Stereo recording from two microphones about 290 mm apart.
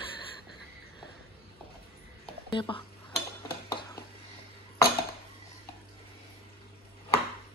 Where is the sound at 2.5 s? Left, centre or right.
Centre.